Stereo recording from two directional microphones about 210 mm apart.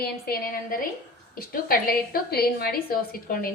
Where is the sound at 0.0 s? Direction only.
45° left (ahead or behind).